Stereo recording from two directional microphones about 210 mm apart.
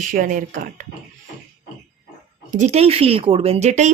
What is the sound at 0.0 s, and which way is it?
Speech, 40° right (ahead or behind).